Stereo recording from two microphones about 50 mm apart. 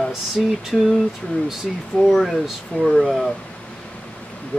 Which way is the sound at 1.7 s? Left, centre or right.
Centre.